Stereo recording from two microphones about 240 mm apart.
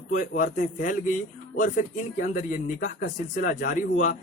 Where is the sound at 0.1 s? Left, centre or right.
Left.